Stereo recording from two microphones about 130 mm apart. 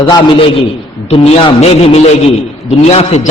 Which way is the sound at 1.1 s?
50° left (ahead or behind).